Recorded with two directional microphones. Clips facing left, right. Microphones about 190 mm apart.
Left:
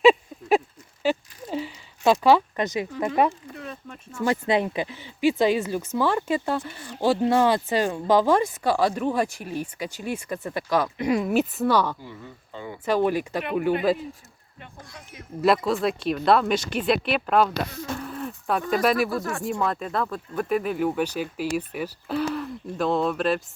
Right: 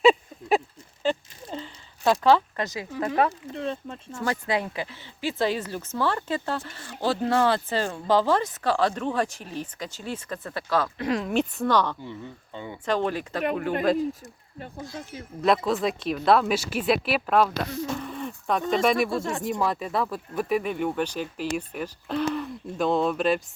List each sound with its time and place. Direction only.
0.0 s a sound: centre (ahead or behind); by 2.8 s 20° left (ahead or behind)
3.5 s speech: 30° right (ahead or behind)
4.2 s speech: 20° left (ahead or behind); by 14.0 s 5° left (ahead or behind)
15.4 s speech: 5° left (ahead or behind)
19.1 s speech: 25° right (ahead or behind)
19.4 s speech: centre (ahead or behind)